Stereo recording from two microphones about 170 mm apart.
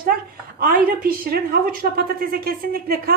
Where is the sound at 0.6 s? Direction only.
55° right (ahead or behind).